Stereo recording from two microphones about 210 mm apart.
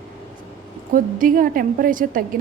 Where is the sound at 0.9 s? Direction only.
40° right (ahead or behind).